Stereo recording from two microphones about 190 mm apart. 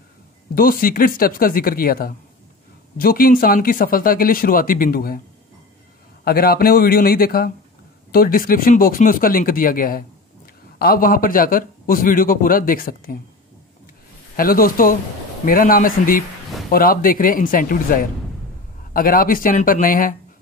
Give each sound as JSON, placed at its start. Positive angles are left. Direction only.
{"t": 0.6, "sound": "speech", "side_deg": 50}
{"t": 6.2, "sound": "speech", "side_deg": 55}
{"t": 14.3, "sound": "speech", "side_deg": 50}